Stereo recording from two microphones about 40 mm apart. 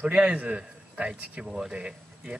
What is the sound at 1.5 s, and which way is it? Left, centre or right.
Speech, centre.